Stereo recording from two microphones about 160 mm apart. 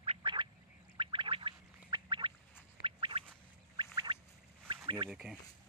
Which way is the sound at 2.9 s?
35° right (ahead or behind).